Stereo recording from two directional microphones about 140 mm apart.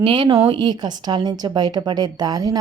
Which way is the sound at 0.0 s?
35° right (ahead or behind).